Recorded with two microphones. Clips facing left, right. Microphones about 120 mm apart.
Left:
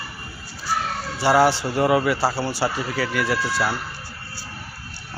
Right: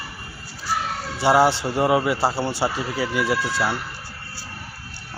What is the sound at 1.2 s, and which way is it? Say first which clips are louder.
Speech: even; 20° right (ahead or behind).